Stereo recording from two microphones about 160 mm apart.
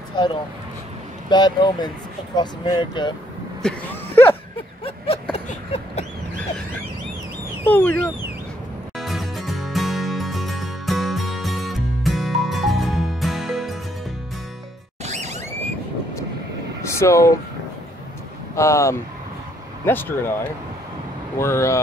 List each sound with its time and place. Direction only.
0.2 s speech: 30° left (ahead or behind)
3.6 s a sound: 10° left (ahead or behind)
4.8 s a sound: 35° left (ahead or behind)
7.7 s car alarm: 10° left (ahead or behind)
8.9 s music: centre (ahead or behind)
15.0 s a sound: 45° right (ahead or behind)
16.8 s vehicle: 20° left (ahead or behind)
18.6 s speech: 20° left (ahead or behind)
21.4 s speech: 15° left (ahead or behind)